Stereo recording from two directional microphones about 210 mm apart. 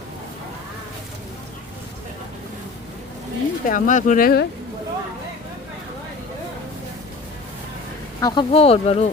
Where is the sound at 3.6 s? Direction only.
40° left (ahead or behind).